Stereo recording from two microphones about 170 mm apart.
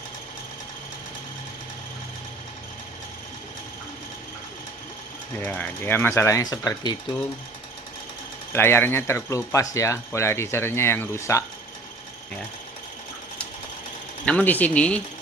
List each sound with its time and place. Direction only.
5.4 s speech: 10° left (ahead or behind)
8.5 s speech: 15° left (ahead or behind)
14.2 s speech: 10° left (ahead or behind)